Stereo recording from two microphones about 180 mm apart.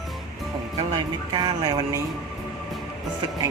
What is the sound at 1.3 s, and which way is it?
Speech, 20° right (ahead or behind).